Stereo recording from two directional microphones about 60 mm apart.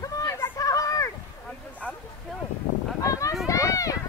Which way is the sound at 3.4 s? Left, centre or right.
Left.